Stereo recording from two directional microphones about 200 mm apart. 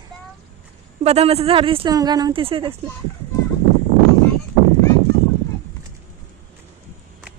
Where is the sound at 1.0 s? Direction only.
30° right (ahead or behind).